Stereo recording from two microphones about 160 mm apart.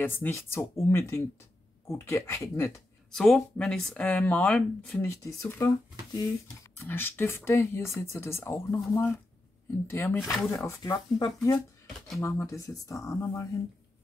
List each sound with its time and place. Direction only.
0.0 s speech: 15° left (ahead or behind)
3.1 s speech: 5° left (ahead or behind)